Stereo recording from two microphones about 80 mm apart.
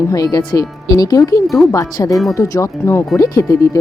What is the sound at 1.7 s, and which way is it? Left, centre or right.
Speech, left.